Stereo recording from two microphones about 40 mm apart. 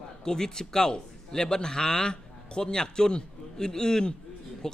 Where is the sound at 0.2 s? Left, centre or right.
Centre.